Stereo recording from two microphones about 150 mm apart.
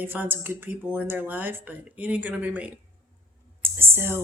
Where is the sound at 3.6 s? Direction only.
15° right (ahead or behind).